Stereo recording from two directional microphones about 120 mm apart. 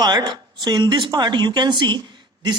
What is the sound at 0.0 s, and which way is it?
A man's voice, 35° right (ahead or behind).